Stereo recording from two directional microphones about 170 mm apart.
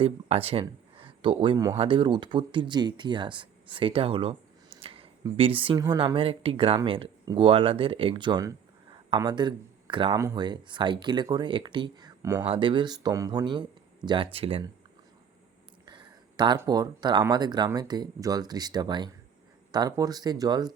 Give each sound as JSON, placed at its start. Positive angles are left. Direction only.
{"t": 0.0, "sound": "speech", "side_deg": -35}
{"t": 12.5, "sound": "speech", "side_deg": -30}
{"t": 15.9, "sound": "a sound", "side_deg": -25}
{"t": 16.6, "sound": "speech", "side_deg": -20}